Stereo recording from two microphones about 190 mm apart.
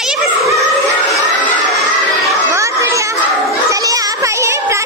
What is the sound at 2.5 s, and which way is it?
Children playing, 15° right (ahead or behind).